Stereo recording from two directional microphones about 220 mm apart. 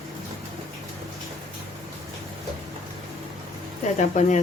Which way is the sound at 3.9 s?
35° left (ahead or behind).